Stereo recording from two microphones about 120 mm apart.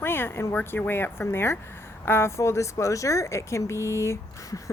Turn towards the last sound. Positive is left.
turn(degrees=25)  # may be behind; listen again after turning